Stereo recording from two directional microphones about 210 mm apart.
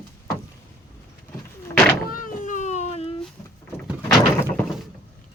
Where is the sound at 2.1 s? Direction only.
40° left (ahead or behind).